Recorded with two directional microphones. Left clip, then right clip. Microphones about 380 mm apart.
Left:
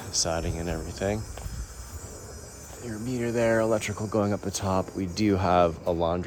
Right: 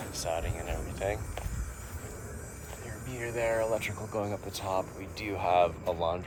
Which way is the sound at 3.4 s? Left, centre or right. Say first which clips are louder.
Left 5 dB; left.